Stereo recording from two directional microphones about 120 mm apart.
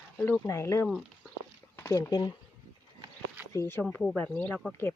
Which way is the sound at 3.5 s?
20° left (ahead or behind).